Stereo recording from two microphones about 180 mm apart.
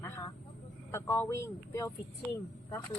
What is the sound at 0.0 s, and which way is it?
Vehicle, 15° left (ahead or behind).